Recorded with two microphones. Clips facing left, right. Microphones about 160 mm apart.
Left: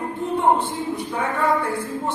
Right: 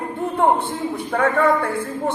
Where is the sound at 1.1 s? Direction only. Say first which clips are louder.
Right 5 dB; 60° right (ahead or behind).